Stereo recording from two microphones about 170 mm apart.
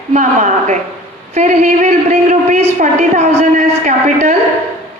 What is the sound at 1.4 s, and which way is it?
A man's voice, 45° right (ahead or behind).